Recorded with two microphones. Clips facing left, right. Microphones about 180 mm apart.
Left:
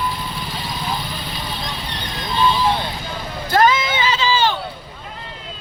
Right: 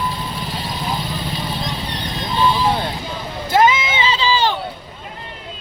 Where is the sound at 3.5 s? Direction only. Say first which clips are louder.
Right 1 dB; 25° right (ahead or behind).